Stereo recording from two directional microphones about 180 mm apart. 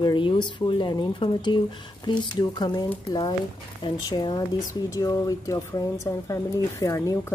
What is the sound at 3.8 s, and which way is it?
Speech, 25° left (ahead or behind).